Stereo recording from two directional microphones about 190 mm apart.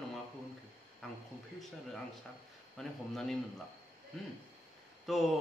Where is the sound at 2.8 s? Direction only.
Centre (ahead or behind).